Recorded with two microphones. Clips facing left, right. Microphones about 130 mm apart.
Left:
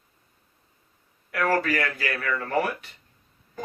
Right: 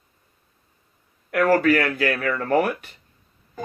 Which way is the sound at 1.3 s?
55° right (ahead or behind).